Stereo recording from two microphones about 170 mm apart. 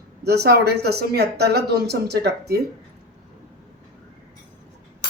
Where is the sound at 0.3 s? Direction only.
75° right (ahead or behind).